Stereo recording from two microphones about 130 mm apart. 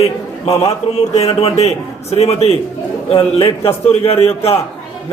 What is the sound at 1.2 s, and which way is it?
A man's voice, 55° left (ahead or behind).